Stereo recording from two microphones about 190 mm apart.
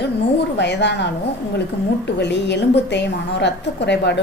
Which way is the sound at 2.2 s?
65° left (ahead or behind).